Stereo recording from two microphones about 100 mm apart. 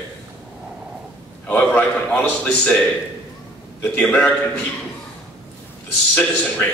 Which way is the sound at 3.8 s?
10° left (ahead or behind).